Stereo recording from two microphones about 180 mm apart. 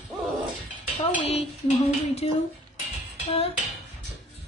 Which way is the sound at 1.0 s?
35° left (ahead or behind).